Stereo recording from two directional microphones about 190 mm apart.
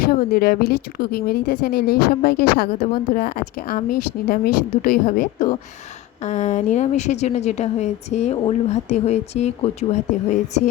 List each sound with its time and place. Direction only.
0.1 s a woman's voice: 55° left (ahead or behind); by 10.6 s 40° left (ahead or behind)